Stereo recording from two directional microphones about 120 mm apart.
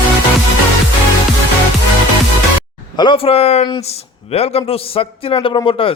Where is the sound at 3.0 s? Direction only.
45° left (ahead or behind).